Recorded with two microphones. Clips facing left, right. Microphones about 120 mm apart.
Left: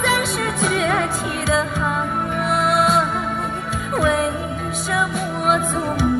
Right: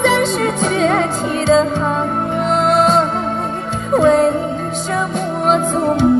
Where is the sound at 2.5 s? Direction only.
25° right (ahead or behind).